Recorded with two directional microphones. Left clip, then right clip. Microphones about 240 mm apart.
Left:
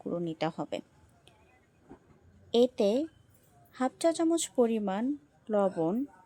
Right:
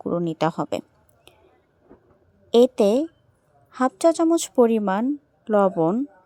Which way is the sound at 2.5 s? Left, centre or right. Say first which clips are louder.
Right 9 dB; right.